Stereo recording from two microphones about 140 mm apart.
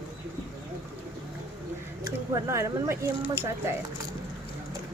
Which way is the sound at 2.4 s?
20° right (ahead or behind).